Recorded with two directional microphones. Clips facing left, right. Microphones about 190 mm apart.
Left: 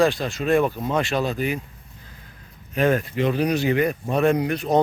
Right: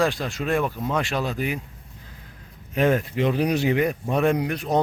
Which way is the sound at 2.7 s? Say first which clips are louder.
Even; 20° right (ahead or behind).